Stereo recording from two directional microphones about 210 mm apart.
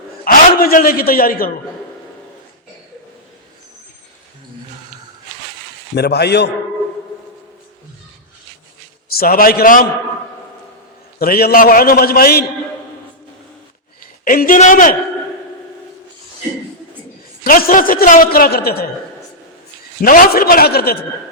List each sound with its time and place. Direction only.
0.3 s a man's voice: 45° left (ahead or behind)
6.0 s a man's voice: 50° left (ahead or behind)
9.1 s a man's voice: 45° left (ahead or behind)
11.2 s a man's voice: 45° left (ahead or behind)
14.3 s a man's voice: 40° left (ahead or behind)
17.4 s a man's voice: 45° left (ahead or behind)
20.0 s a man's voice: 40° left (ahead or behind)